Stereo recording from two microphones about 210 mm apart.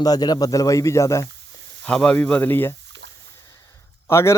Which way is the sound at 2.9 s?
55° right (ahead or behind).